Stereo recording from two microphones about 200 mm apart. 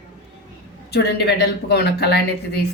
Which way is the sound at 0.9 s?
55° left (ahead or behind).